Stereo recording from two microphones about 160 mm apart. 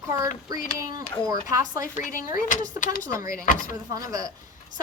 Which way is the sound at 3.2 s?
55° left (ahead or behind).